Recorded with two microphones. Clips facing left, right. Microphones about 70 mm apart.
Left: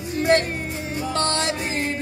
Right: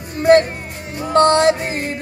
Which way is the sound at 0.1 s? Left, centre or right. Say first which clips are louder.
Right 7 dB; right.